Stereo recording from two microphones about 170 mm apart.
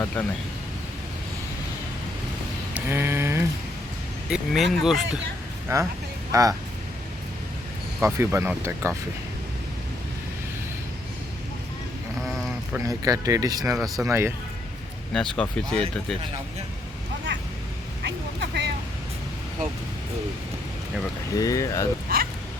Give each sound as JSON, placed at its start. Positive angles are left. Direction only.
{"t": 0.2, "sound": "speech", "side_deg": 5}
{"t": 2.7, "sound": "a sound", "side_deg": -15}
{"t": 4.3, "sound": "speech", "side_deg": 0}
{"t": 5.7, "sound": "speech", "side_deg": -15}
{"t": 8.0, "sound": "speech", "side_deg": -15}
{"t": 12.2, "sound": "a sound", "side_deg": 0}
{"t": 12.8, "sound": "speech", "side_deg": -20}
{"t": 15.1, "sound": "speech", "side_deg": 5}
{"t": 18.0, "sound": "vehicle", "side_deg": -85}
{"t": 21.3, "sound": "speech", "side_deg": 20}